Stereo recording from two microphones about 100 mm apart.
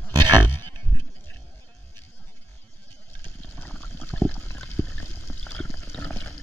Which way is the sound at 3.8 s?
20° left (ahead or behind).